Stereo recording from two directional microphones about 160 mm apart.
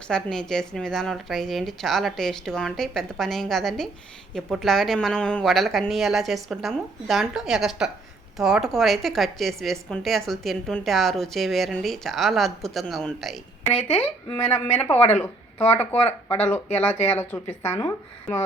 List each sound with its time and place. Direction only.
0.1 s a woman's voice: 5° left (ahead or behind)
14.9 s speech: 40° left (ahead or behind)
15.2 s a woman's voice: 10° left (ahead or behind)